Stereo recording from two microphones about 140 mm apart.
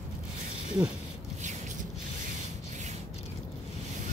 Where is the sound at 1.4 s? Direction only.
60° right (ahead or behind).